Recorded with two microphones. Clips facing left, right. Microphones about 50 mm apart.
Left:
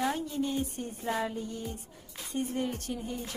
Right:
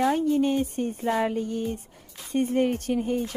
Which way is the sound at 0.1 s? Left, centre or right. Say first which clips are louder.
Right 9 dB; right.